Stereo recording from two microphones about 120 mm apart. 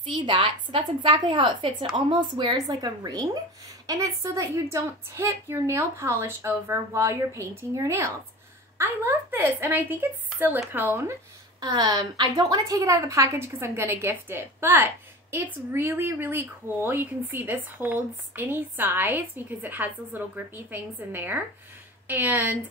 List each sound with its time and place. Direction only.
0.0 s a woman's voice: 40° right (ahead or behind); by 11.1 s 20° right (ahead or behind)
11.6 s a woman's voice: 35° right (ahead or behind); by 22.6 s 15° right (ahead or behind)